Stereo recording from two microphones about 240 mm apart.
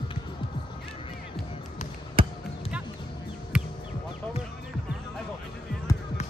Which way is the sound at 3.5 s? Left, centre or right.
Centre.